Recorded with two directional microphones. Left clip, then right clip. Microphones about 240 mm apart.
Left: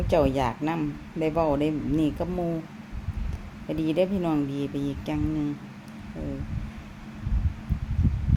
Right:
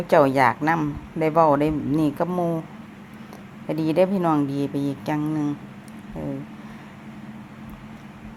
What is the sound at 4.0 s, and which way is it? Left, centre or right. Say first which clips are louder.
Speech: right 7 dB; centre.